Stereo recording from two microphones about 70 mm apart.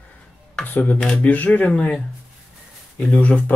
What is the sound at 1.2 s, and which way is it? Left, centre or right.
Speech, left.